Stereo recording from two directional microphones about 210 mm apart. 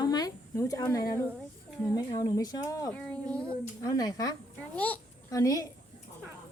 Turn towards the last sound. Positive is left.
turn(degrees=15)  # may be behind; listen again after turning